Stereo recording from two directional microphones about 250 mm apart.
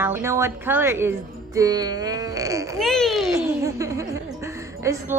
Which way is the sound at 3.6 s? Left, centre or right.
Centre.